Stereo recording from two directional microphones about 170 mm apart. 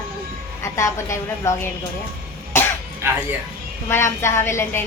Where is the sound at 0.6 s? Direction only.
15° left (ahead or behind).